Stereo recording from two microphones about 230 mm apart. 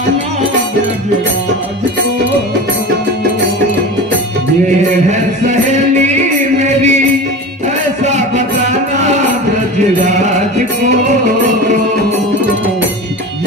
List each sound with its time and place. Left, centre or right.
5.1 s music: right